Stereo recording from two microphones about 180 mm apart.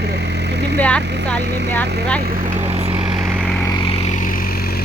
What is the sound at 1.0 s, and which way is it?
Speech, 70° right (ahead or behind).